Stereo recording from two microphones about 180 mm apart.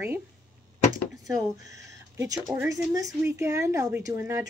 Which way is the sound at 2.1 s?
20° right (ahead or behind).